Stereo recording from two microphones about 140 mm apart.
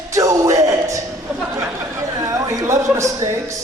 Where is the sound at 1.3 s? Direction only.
5° right (ahead or behind).